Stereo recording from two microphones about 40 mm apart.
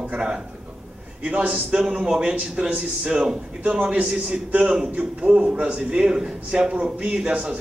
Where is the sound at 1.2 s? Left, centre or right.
Right.